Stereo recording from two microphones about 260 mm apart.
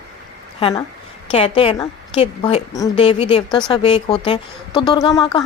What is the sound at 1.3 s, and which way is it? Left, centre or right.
A woman's voice, left.